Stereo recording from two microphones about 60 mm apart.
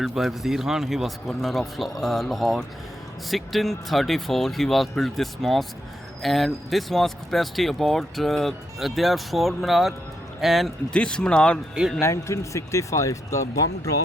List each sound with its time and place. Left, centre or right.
0.1 s speech: centre
10.9 s speech: centre
11.9 s speech: left